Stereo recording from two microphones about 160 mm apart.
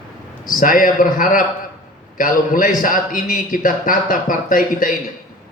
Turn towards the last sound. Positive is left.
turn(degrees=60)  # may be behind; listen again after turning